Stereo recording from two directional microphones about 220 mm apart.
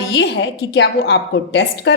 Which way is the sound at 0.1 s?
55° left (ahead or behind).